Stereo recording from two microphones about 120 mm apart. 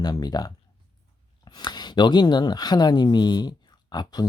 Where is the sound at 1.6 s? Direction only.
35° left (ahead or behind).